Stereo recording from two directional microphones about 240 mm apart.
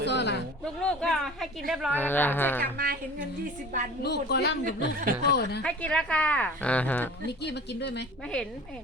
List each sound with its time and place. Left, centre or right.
0.0 s a sound: left
0.6 s a woman's voice: centre
2.7 s speech: right
4.0 s speech: left
4.6 s speech: right
5.3 s speech: left
5.6 s a woman's voice: centre
7.3 s speech: left